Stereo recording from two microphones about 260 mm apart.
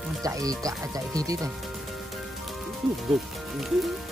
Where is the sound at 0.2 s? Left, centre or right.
Centre.